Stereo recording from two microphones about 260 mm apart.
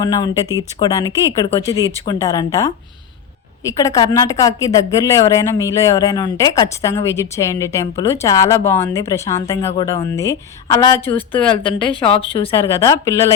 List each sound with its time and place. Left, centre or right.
0.0 s speech: centre